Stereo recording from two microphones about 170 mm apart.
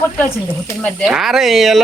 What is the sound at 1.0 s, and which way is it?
Speech, 5° right (ahead or behind).